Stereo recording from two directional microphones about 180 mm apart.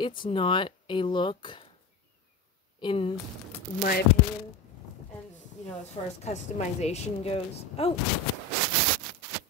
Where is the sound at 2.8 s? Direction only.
30° left (ahead or behind).